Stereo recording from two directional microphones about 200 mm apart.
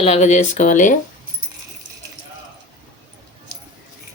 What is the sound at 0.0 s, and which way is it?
Speech, 35° left (ahead or behind).